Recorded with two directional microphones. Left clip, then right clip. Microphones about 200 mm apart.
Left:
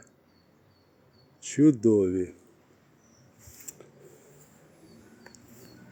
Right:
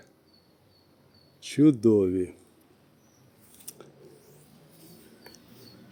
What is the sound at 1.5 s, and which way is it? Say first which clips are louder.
Speech: right 1 dB; centre (ahead or behind).